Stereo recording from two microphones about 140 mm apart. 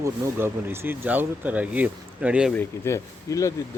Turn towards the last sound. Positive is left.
turn(degrees=20)  # may be behind; listen again after turning